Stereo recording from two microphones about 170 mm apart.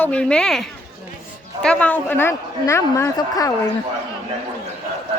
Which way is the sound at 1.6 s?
10° left (ahead or behind).